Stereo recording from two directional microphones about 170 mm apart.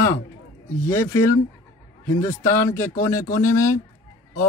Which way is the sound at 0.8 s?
15° left (ahead or behind).